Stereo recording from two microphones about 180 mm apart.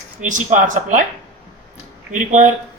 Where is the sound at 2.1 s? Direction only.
45° right (ahead or behind).